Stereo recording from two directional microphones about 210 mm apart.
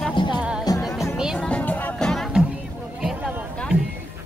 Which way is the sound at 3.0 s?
Centre (ahead or behind).